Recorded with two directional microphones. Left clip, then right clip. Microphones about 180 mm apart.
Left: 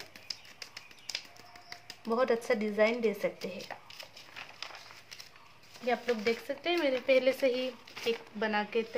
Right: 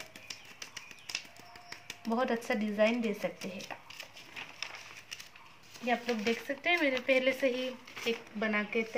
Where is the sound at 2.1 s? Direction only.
35° left (ahead or behind).